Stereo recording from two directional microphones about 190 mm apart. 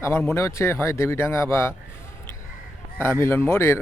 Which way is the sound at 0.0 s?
15° left (ahead or behind).